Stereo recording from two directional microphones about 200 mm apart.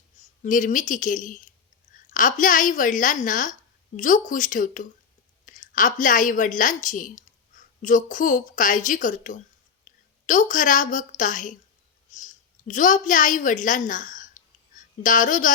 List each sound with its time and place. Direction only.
0.4 s a woman's voice: 40° left (ahead or behind)